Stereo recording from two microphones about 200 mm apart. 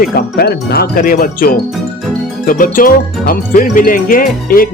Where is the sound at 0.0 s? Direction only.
50° left (ahead or behind).